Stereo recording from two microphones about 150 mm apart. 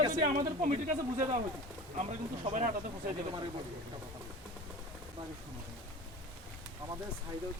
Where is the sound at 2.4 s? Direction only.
55° right (ahead or behind).